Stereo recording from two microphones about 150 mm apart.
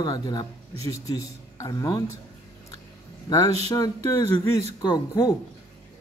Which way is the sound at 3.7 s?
20° left (ahead or behind).